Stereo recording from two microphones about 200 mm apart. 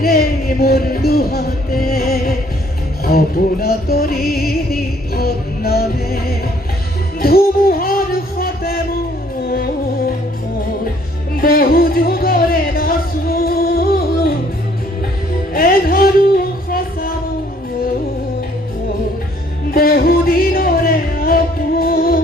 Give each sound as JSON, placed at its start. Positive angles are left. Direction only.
{"t": 0.0, "sound": "music", "side_deg": 50}
{"t": 11.3, "sound": "music", "side_deg": 50}
{"t": 15.5, "sound": "music", "side_deg": 45}
{"t": 19.7, "sound": "music", "side_deg": 50}